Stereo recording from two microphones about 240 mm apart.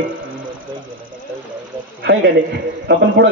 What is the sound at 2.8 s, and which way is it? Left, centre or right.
Speech, right.